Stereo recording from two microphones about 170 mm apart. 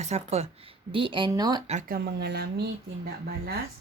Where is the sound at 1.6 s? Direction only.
45° right (ahead or behind).